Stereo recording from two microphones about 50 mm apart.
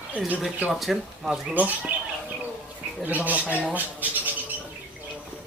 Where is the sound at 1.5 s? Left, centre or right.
Right.